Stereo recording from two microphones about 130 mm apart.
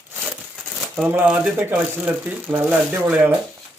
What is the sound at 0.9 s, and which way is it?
Speech, 10° right (ahead or behind).